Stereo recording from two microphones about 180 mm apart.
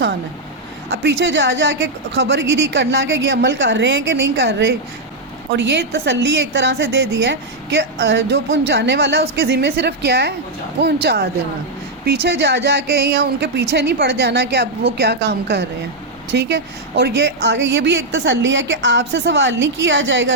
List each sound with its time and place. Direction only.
0.9 s a woman's voice: 80° right